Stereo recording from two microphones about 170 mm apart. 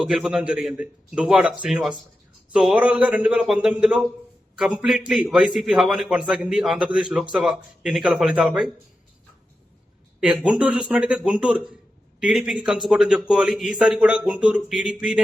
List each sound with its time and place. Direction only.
0.0 s a man's voice: 5° right (ahead or behind)
10.2 s a man's voice: 5° right (ahead or behind)